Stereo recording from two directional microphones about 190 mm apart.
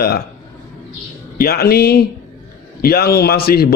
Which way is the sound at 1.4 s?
55° left (ahead or behind).